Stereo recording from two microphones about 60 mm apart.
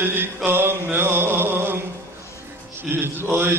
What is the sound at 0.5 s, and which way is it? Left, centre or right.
Mantra, right.